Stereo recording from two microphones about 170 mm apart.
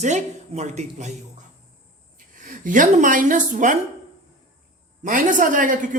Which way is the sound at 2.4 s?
50° right (ahead or behind).